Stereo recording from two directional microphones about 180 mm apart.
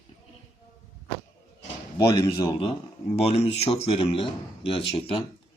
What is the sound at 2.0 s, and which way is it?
Speech, 20° left (ahead or behind).